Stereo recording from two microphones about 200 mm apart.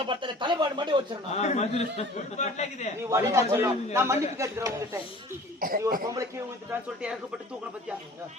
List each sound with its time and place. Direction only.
0.0 s speech: 25° right (ahead or behind)
1.3 s speech: 35° left (ahead or behind)
3.0 s speech: 15° right (ahead or behind)
5.5 s speech: 45° right (ahead or behind)
6.7 s speech: 5° right (ahead or behind)